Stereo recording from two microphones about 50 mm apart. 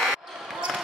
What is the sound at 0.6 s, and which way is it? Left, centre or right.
Basketball bounce, centre.